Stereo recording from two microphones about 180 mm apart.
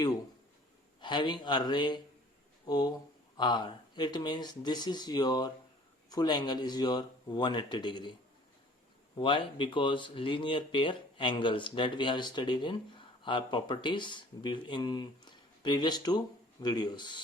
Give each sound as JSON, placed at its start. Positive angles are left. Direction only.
{"t": 1.0, "sound": "speech", "side_deg": 25}
{"t": 9.1, "sound": "speech", "side_deg": 30}